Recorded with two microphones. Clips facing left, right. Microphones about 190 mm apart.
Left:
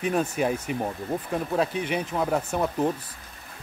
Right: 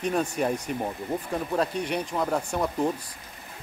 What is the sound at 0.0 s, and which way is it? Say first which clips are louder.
Speech: left 1 dB; 5° left (ahead or behind).